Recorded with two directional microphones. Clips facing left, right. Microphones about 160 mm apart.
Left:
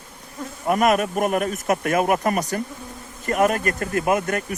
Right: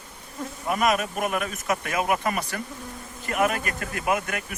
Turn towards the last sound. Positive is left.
turn(degrees=40)  # may be behind; listen again after turning